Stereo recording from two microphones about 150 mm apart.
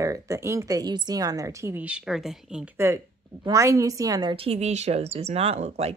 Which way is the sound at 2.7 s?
15° right (ahead or behind).